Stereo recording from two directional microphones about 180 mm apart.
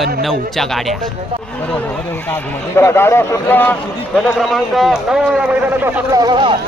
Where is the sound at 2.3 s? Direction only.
15° left (ahead or behind).